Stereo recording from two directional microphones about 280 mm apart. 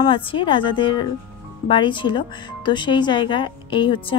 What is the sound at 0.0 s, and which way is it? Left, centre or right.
Speech, centre.